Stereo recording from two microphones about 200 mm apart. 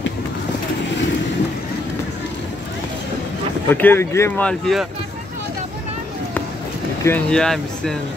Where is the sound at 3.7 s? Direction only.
10° left (ahead or behind).